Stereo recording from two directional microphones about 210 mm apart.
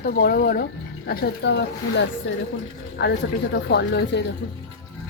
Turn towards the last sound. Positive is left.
turn(degrees=55)  # may be behind; listen again after turning